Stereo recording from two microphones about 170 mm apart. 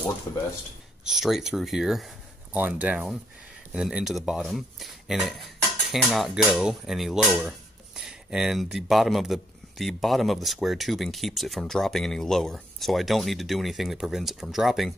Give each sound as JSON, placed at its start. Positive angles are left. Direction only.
{"t": 1.0, "sound": "speech", "side_deg": 0}